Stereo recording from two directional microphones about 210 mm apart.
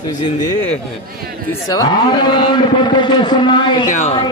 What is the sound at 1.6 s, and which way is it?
A man's voice, 20° left (ahead or behind).